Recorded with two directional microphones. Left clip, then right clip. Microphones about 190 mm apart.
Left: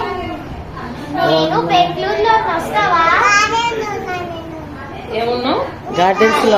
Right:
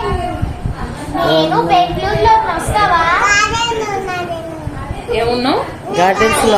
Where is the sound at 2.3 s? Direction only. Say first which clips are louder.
Right 4 dB; centre (ahead or behind).